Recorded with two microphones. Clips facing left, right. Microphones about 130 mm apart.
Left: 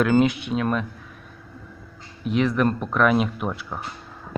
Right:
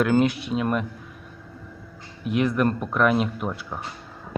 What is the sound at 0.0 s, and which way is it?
Speech, 5° right (ahead or behind).